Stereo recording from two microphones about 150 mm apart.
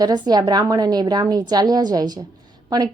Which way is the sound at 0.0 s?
25° right (ahead or behind).